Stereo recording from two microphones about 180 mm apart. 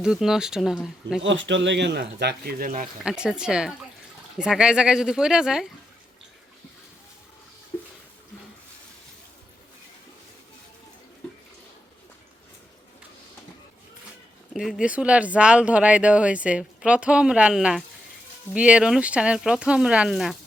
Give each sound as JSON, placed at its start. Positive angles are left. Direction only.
{"t": 0.0, "sound": "speech", "side_deg": -5}
{"t": 1.2, "sound": "speech", "side_deg": -90}
{"t": 3.0, "sound": "speech", "side_deg": -5}
{"t": 14.5, "sound": "speech", "side_deg": -5}